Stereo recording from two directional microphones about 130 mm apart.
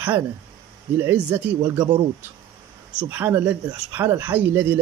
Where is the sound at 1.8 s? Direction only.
50° right (ahead or behind).